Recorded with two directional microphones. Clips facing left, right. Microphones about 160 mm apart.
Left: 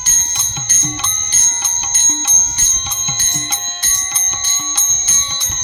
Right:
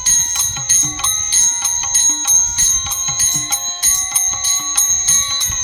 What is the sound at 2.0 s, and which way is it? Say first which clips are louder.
Clock: left 3 dB; centre (ahead or behind).